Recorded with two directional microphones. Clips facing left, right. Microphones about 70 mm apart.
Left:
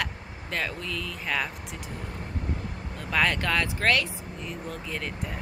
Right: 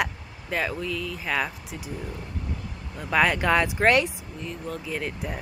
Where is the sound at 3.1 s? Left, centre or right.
Centre.